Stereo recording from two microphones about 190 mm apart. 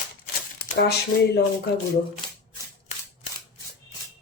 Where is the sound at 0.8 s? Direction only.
60° left (ahead or behind).